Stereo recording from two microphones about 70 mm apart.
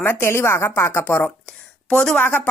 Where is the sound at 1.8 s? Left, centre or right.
Centre.